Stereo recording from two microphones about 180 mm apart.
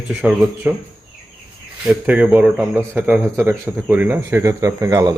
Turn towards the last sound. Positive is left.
turn(degrees=-20)  # may be behind; listen again after turning